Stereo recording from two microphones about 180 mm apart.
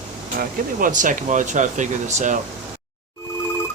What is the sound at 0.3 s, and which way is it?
Speech, 50° right (ahead or behind).